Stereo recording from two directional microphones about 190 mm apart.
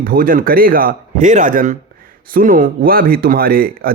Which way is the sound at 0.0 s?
50° right (ahead or behind).